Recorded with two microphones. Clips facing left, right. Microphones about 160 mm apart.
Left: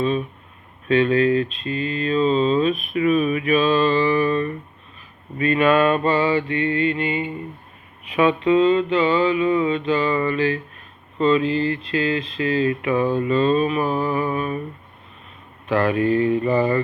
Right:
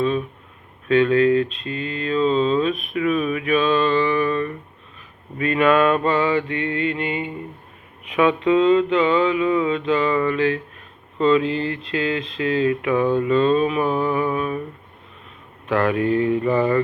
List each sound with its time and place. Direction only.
0.9 s mantra: 5° left (ahead or behind)
1.6 s speech: 5° left (ahead or behind)
5.4 s mantra: 5° right (ahead or behind)
11.4 s a sound: 70° right (ahead or behind)
12.4 s mantra: centre (ahead or behind)
15.9 s mantra: centre (ahead or behind)